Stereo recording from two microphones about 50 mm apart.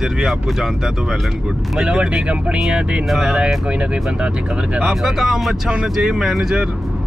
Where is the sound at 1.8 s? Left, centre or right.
Centre.